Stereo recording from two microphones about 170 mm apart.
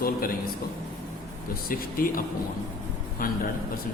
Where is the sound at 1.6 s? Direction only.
55° left (ahead or behind).